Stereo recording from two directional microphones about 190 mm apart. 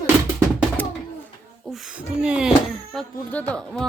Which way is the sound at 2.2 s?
5° right (ahead or behind).